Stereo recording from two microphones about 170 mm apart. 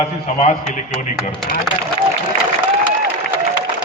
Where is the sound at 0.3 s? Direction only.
45° left (ahead or behind).